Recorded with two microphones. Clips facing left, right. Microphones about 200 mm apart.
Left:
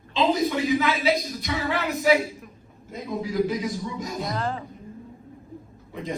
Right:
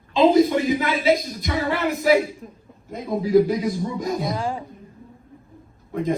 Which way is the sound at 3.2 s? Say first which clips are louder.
Right 8 dB; 50° right (ahead or behind).